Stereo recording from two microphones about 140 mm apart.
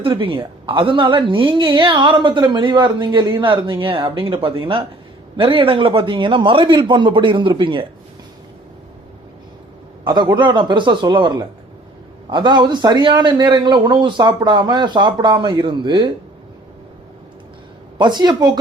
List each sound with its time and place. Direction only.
0.0 s a man's voice: 40° right (ahead or behind)
10.0 s a man's voice: 30° right (ahead or behind)
17.9 s speech: 30° right (ahead or behind)